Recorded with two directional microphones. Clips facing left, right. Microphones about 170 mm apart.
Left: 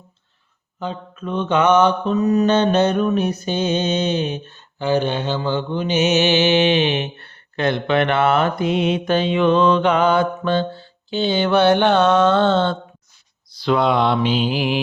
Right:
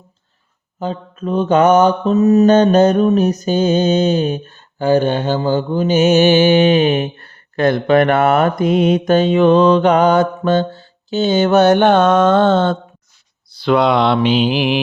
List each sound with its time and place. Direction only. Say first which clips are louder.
0.8 s mantra: right 5 dB; 40° right (ahead or behind)
13.6 s mantra: right 4 dB; 70° right (ahead or behind)